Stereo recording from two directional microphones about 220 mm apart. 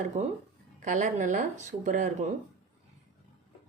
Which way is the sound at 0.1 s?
35° right (ahead or behind).